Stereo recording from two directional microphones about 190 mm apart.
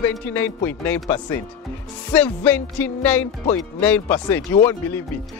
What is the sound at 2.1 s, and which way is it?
Speech, 10° left (ahead or behind).